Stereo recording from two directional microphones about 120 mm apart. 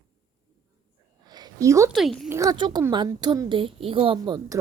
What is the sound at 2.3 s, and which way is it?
Speech, 25° right (ahead or behind).